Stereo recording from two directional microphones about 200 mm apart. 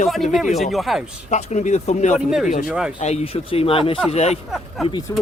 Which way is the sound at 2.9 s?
35° left (ahead or behind).